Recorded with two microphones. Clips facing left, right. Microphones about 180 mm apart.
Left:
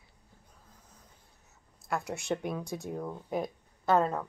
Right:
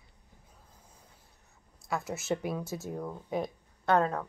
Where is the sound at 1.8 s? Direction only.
Centre (ahead or behind).